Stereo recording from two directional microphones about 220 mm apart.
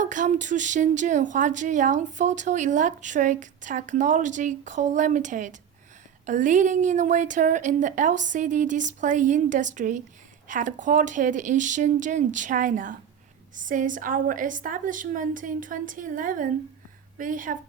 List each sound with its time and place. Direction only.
0.0 s a woman's voice: 35° right (ahead or behind)